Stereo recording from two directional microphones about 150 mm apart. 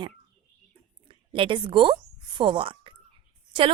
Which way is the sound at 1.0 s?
35° right (ahead or behind).